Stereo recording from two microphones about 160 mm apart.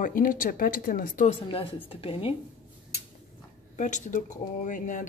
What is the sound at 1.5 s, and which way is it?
Speech, 35° left (ahead or behind).